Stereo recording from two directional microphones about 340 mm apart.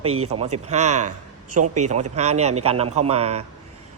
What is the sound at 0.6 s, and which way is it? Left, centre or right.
A man's voice, centre.